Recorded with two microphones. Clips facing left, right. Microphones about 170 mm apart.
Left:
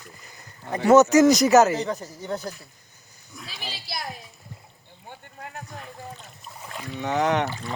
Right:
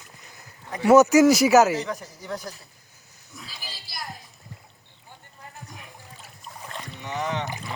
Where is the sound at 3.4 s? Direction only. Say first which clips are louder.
Left 8 dB; 70° left (ahead or behind).